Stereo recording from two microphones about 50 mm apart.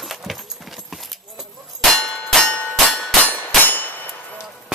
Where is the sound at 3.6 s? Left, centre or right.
Left.